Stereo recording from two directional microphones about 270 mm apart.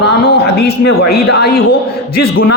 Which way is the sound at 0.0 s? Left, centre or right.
Left.